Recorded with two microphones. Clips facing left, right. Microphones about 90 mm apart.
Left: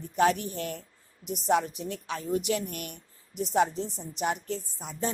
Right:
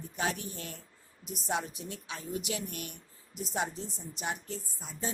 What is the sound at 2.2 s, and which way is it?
A woman's voice, 50° left (ahead or behind).